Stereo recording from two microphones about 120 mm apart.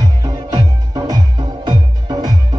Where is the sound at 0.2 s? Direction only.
30° right (ahead or behind).